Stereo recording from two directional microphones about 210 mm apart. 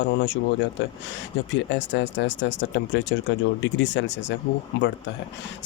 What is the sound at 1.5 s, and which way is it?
Speech, 60° left (ahead or behind).